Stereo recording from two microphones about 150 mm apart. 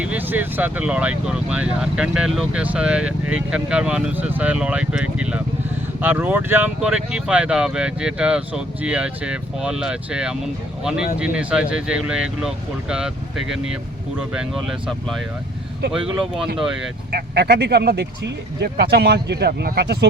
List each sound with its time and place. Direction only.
0.0 s speech: 10° right (ahead or behind)
17.1 s speech: 90° right